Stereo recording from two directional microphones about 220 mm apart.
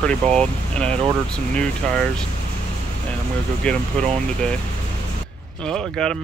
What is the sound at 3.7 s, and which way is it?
Speech, 5° left (ahead or behind).